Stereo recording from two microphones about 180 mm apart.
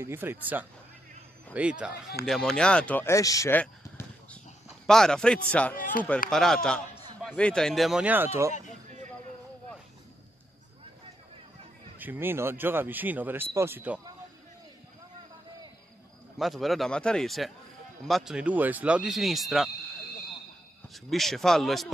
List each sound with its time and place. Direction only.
0.0 s speech: 15° right (ahead or behind); by 3.6 s 15° left (ahead or behind)
4.8 s speech: 5° left (ahead or behind)
5.8 s speech: 50° left (ahead or behind)
6.3 s speech: centre (ahead or behind); by 8.5 s 15° right (ahead or behind)
12.0 s speech: 10° right (ahead or behind)
16.3 s speech: centre (ahead or behind)
20.9 s speech: centre (ahead or behind)